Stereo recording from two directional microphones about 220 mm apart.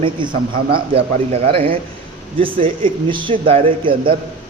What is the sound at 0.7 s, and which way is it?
A man's voice, 25° right (ahead or behind).